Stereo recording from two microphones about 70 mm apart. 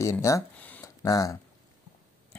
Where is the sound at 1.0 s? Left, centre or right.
Left.